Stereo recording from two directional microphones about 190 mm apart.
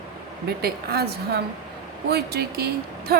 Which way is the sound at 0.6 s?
55° right (ahead or behind).